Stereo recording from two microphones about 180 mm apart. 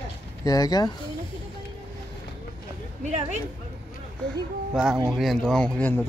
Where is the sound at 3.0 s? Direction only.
40° right (ahead or behind).